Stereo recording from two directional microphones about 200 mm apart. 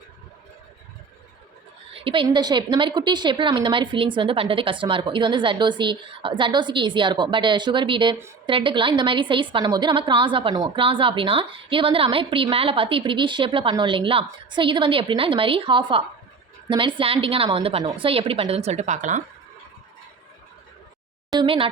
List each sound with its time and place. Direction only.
1.9 s a woman's voice: 25° right (ahead or behind)
21.2 s speech: 20° right (ahead or behind)